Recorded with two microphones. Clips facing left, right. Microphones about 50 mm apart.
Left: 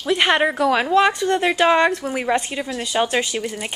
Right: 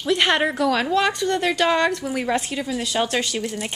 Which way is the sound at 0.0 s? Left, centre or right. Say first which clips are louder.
Left 2 dB; centre.